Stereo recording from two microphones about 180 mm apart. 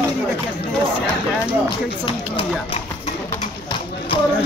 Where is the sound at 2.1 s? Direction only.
30° left (ahead or behind).